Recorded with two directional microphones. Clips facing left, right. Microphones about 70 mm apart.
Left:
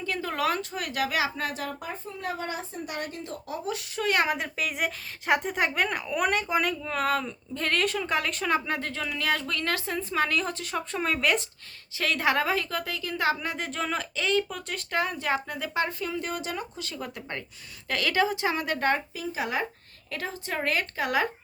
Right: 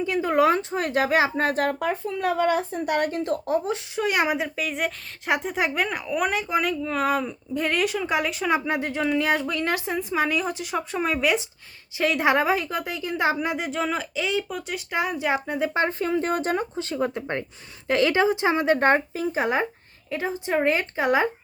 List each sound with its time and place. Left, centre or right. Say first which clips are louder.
0.0 s speech: right 8 dB; centre; by 1.5 s right
1.8 s speech: right 10 dB; right
3.7 s a woman's voice: right 3 dB; centre
11.9 s a woman's voice: right 5 dB; right
20.1 s a woman's voice: right 7 dB; centre